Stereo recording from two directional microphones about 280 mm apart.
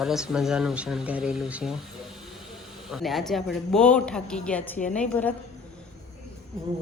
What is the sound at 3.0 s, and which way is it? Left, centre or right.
Speech, centre.